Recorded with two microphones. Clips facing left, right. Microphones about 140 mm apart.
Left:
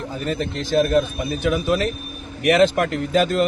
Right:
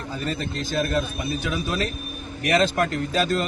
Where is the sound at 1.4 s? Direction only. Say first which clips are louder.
Left 10 dB; 55° left (ahead or behind).